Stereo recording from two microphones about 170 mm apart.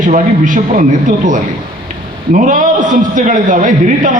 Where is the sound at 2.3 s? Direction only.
50° right (ahead or behind).